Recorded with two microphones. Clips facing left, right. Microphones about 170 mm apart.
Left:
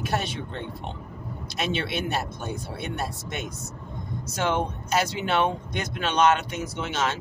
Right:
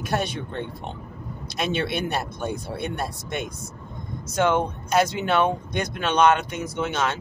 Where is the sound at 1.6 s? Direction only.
50° right (ahead or behind).